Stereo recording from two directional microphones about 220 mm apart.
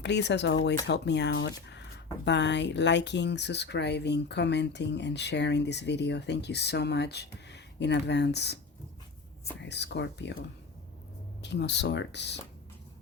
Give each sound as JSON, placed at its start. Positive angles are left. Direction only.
{"t": 0.0, "sound": "speech", "side_deg": 50}
{"t": 9.6, "sound": "speech", "side_deg": 50}
{"t": 11.4, "sound": "speech", "side_deg": 50}